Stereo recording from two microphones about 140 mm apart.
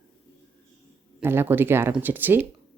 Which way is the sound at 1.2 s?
15° right (ahead or behind).